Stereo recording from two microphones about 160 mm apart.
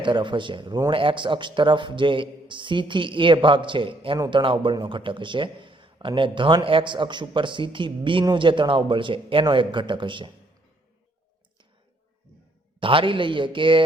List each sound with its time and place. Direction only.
0.0 s a man's voice: 30° right (ahead or behind)
12.8 s a man's voice: 35° right (ahead or behind)